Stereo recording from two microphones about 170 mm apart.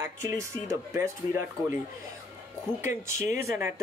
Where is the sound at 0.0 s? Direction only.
15° right (ahead or behind).